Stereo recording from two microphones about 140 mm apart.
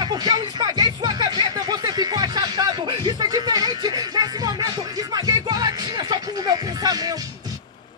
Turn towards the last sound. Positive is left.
turn(degrees=-30)  # may be behind; listen again after turning